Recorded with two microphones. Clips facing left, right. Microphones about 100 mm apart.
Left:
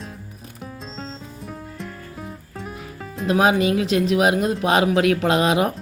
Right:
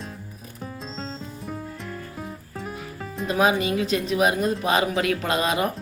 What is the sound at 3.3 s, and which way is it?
Speech, 90° left.